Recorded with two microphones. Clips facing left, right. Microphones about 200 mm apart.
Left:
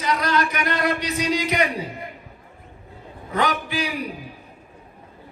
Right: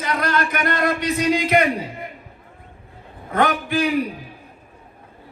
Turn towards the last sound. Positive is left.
turn(degrees=-50)  # may be behind; listen again after turning